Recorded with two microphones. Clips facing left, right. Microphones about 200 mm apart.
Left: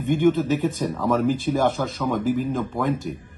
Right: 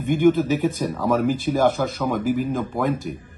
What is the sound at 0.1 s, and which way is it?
Speech, 5° right (ahead or behind).